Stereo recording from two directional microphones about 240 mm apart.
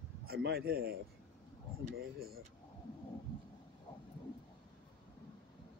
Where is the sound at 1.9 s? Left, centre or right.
Right.